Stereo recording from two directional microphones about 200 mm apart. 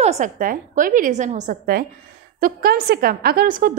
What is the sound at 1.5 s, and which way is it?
A woman's voice, 45° right (ahead or behind).